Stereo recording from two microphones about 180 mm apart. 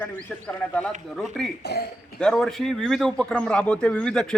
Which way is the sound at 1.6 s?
60° left (ahead or behind).